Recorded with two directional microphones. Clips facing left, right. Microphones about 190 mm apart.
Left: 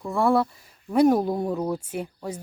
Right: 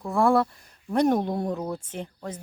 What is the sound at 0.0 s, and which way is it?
A woman's voice, centre (ahead or behind).